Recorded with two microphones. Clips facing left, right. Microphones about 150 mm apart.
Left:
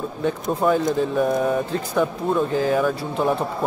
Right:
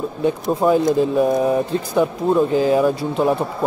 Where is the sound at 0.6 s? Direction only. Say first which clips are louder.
Right 4 dB; 20° right (ahead or behind).